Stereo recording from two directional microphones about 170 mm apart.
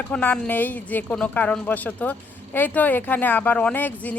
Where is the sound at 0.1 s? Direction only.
10° left (ahead or behind).